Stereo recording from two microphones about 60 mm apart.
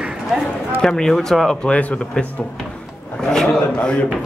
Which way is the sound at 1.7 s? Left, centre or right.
Left.